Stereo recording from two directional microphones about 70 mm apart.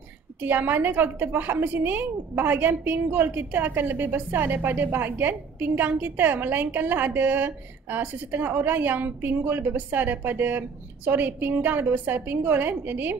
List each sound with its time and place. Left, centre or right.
0.4 s a woman's voice: right